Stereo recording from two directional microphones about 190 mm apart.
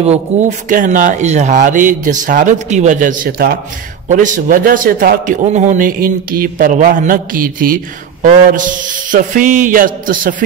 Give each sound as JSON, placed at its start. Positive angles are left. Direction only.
{"t": 0.0, "sound": "speech", "side_deg": -35}
{"t": 4.1, "sound": "a man's voice", "side_deg": -40}